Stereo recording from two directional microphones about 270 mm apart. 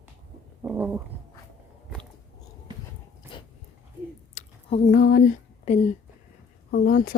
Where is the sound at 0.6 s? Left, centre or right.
Centre.